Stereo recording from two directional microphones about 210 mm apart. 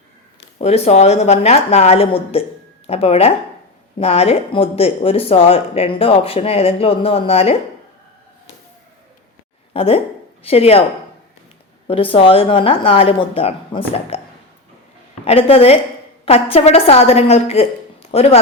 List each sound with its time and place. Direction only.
0.6 s speech: 30° left (ahead or behind)
9.7 s speech: 25° left (ahead or behind)
11.9 s speech: 25° left (ahead or behind)
15.2 s speech: 30° left (ahead or behind)